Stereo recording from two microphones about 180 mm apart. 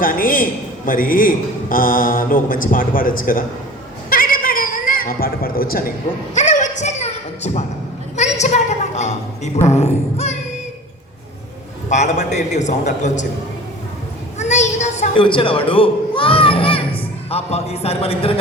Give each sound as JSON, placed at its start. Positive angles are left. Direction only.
{"t": 0.0, "sound": "speech", "side_deg": 50}
{"t": 4.1, "sound": "chuckle", "side_deg": 50}
{"t": 6.3, "sound": "a sound", "side_deg": 45}
{"t": 8.1, "sound": "a woman's voice", "side_deg": 40}
{"t": 11.9, "sound": "a man's voice", "side_deg": 40}
{"t": 14.3, "sound": "a sound", "side_deg": 40}